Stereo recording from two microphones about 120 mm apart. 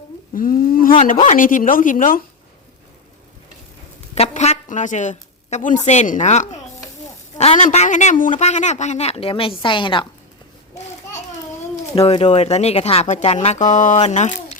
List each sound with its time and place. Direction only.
0.9 s speech: 90° left
4.1 s a woman's voice: 65° left (ahead or behind); by 10.1 s 45° left (ahead or behind)
11.9 s speech: 55° left (ahead or behind); by 14.3 s 75° left (ahead or behind)